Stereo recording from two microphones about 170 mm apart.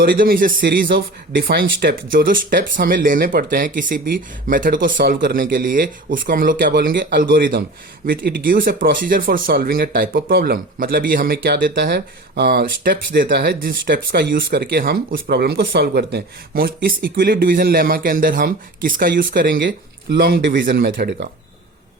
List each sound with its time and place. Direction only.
0.0 s speech: 60° right (ahead or behind)